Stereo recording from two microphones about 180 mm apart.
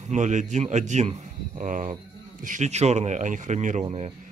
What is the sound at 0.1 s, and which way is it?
Speech, 40° right (ahead or behind).